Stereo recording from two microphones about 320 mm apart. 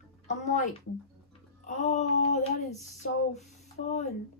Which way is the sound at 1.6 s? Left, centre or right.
Left.